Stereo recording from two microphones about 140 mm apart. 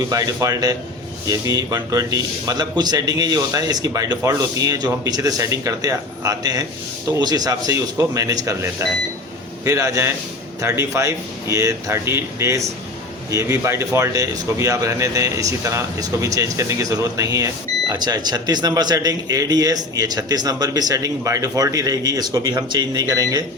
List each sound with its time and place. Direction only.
0.1 s a man's voice: 25° right (ahead or behind)